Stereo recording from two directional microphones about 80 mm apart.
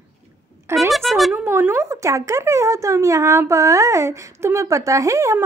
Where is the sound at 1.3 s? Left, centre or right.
Right.